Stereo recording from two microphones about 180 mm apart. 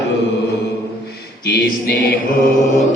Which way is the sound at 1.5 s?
70° left (ahead or behind).